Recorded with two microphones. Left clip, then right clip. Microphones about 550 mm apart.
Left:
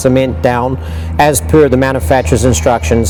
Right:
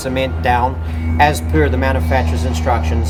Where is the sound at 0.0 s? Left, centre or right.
Left.